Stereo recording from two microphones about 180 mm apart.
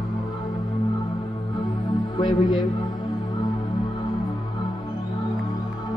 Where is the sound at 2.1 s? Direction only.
25° left (ahead or behind).